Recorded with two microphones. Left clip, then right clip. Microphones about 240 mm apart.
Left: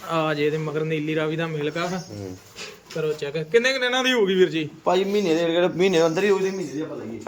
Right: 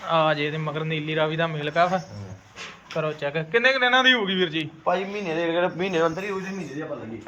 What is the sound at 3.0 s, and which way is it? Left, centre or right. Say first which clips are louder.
A man's voice: left 1 dB; centre.